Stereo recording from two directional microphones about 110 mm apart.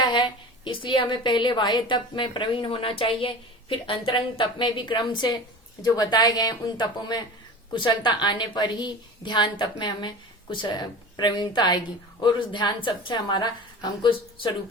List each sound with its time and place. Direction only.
0.0 s a woman's voice: 45° left (ahead or behind)